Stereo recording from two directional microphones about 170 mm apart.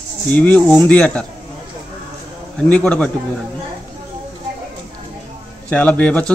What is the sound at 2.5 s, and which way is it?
Speech, 5° left (ahead or behind).